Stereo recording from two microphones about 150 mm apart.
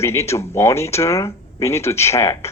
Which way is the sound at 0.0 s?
20° left (ahead or behind).